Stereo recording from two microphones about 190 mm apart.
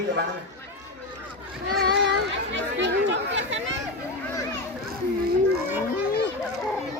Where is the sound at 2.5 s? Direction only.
70° right (ahead or behind).